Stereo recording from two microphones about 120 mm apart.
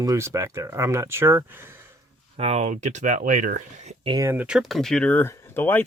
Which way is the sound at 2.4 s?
65° right (ahead or behind).